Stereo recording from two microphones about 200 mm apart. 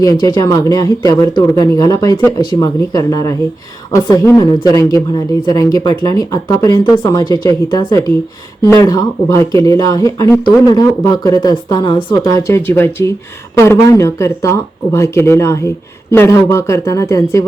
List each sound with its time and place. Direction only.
0.2 s a woman's voice: 20° left (ahead or behind)